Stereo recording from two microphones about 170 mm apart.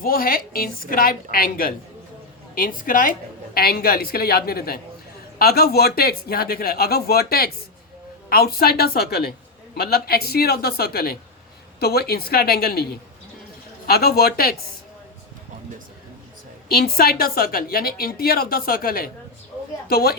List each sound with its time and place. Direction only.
0.0 s a woman's voice: 60° left (ahead or behind)
16.6 s a woman's voice: 65° left (ahead or behind)